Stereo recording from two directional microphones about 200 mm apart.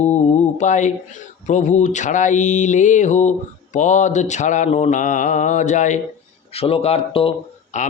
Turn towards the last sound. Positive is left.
turn(degrees=35)  # may be behind; listen again after turning